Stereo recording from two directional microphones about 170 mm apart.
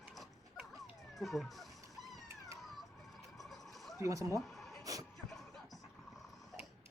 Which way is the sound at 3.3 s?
Centre (ahead or behind).